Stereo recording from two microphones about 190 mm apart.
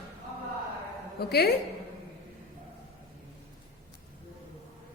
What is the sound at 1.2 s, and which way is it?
Speech, 55° left (ahead or behind).